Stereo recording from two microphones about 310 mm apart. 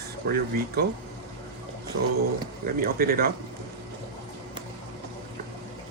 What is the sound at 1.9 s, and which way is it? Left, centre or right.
Speech, right.